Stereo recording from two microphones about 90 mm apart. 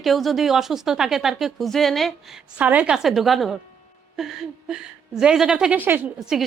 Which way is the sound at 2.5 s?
15° right (ahead or behind).